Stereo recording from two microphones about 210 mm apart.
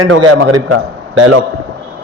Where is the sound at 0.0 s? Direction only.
90° right.